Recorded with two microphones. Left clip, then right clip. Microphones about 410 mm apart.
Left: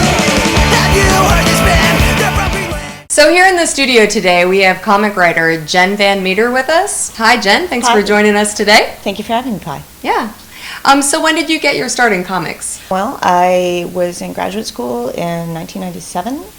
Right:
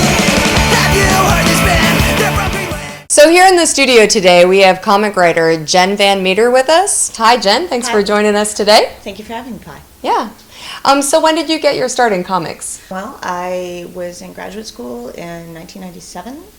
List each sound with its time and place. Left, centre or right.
0.0 s music: centre
3.2 s speech: right
9.0 s a woman's voice: left
10.0 s speech: right
12.9 s a woman's voice: left